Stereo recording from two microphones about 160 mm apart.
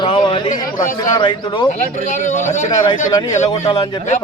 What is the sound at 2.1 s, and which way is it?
Speech, 55° left (ahead or behind).